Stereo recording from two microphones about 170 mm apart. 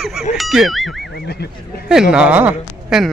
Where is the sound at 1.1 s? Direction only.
70° left (ahead or behind).